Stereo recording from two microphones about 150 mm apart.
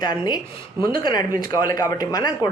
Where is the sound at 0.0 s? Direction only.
30° left (ahead or behind).